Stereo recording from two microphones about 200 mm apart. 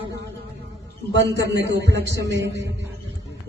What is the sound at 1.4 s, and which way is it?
A man's voice, 60° right (ahead or behind).